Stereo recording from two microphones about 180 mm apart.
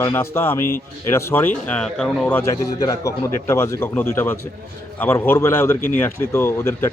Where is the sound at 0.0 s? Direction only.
15° left (ahead or behind).